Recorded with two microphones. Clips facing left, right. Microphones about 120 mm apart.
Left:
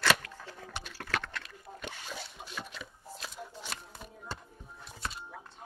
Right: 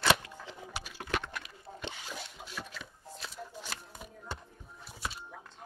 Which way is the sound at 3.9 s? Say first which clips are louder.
Even; 10° right (ahead or behind).